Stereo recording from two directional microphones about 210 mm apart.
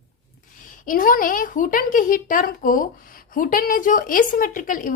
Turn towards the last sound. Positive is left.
turn(degrees=40)  # may be behind; listen again after turning